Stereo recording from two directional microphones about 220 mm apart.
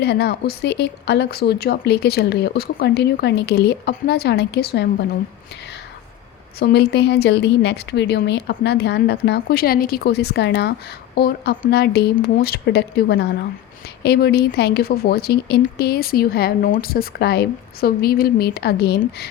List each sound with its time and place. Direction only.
0.0 s speech: 50° left (ahead or behind)
6.6 s speech: 45° left (ahead or behind)